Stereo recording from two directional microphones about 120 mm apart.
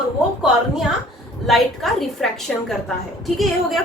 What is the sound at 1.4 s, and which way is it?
A woman's voice, centre (ahead or behind).